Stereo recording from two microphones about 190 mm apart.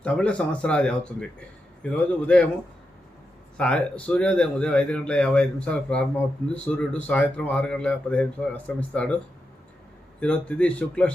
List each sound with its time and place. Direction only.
0.0 s a man's voice: 5° left (ahead or behind)
3.6 s a man's voice: 5° left (ahead or behind)
10.2 s a man's voice: 5° left (ahead or behind)